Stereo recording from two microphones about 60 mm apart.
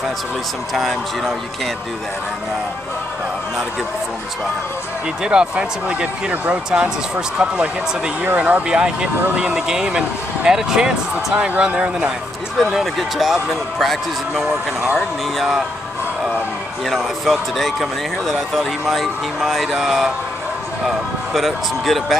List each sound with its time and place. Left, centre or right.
0.7 s speech: centre
5.2 s speech: centre
8.6 s speech: centre
11.3 s speech: right
12.7 s speech: centre
16.9 s speech: centre